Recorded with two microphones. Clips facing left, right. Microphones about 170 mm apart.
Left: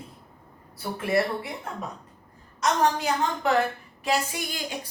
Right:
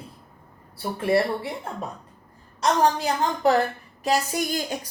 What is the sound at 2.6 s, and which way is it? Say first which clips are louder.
A woman's voice: right 3 dB; 35° right (ahead or behind).